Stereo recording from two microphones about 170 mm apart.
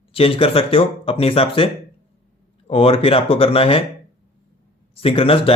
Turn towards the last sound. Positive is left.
turn(degrees=35)  # may be behind; listen again after turning